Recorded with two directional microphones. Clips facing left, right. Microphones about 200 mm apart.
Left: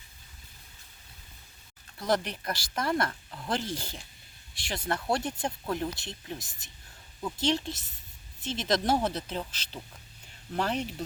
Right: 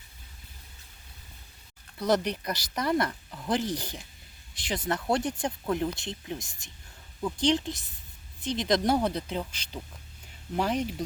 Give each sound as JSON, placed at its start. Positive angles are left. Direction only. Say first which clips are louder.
{"t": 2.0, "sound": "speech", "louder": "right 3 dB", "side_deg": -20}